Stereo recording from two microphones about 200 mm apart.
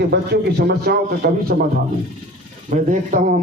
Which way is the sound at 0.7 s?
50° right (ahead or behind).